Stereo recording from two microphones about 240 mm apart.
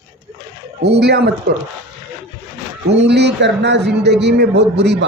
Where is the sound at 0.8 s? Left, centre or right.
Right.